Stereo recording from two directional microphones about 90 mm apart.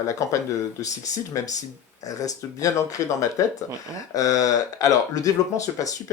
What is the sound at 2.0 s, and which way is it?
Speech, 40° left (ahead or behind).